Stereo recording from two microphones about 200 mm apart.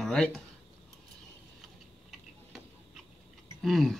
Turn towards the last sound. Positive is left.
turn(degrees=0)  # may be behind; listen again after turning